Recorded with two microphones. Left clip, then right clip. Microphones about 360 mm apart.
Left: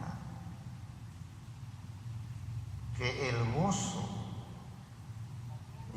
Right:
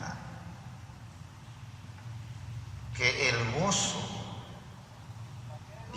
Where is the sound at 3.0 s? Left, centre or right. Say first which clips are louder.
Right 8 dB; right.